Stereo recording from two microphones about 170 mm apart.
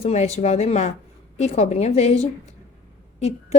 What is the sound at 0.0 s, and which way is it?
A woman's voice, 40° left (ahead or behind).